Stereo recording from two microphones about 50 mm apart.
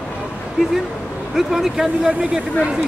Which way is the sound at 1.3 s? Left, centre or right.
Centre.